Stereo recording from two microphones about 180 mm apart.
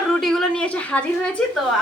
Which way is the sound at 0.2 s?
5° left (ahead or behind).